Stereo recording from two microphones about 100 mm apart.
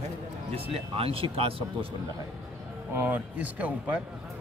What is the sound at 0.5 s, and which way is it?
Speech, 70° right (ahead or behind).